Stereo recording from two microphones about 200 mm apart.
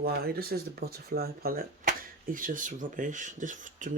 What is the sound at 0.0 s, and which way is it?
Speech, 50° right (ahead or behind).